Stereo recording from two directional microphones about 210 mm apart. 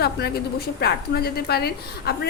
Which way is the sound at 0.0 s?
50° left (ahead or behind).